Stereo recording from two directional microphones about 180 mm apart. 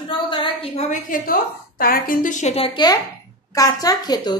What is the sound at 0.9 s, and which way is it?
A woman's voice, 50° left (ahead or behind).